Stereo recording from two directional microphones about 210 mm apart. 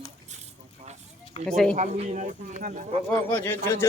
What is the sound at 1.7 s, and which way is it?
Speech, 35° right (ahead or behind).